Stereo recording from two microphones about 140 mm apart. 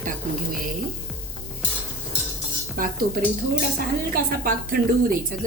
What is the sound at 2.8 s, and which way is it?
Speech, 80° right.